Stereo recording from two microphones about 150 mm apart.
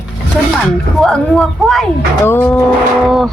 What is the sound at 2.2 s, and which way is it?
Speech, 15° left (ahead or behind).